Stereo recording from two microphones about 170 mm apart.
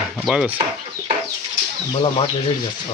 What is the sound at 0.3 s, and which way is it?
Speech, centre (ahead or behind).